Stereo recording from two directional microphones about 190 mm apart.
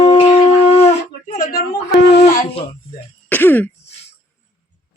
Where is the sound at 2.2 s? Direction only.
30° left (ahead or behind).